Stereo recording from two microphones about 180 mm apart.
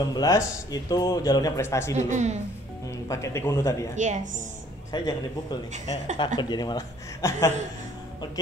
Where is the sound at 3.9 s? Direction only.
40° right (ahead or behind).